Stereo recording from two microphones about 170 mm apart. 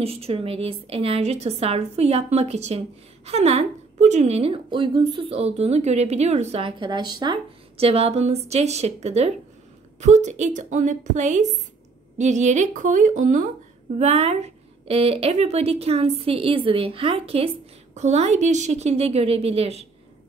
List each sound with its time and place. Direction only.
0.0 s a woman's voice: 35° right (ahead or behind)